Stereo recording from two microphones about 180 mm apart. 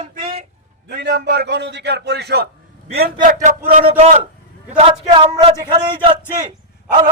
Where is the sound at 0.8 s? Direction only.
55° right (ahead or behind).